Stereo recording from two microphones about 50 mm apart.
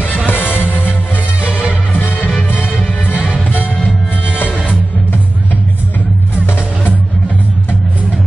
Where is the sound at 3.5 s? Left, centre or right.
Left.